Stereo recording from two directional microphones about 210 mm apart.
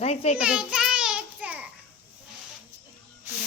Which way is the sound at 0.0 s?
30° left (ahead or behind).